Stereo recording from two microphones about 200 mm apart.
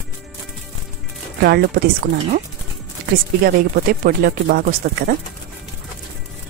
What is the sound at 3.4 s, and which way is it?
Speech, 50° right (ahead or behind).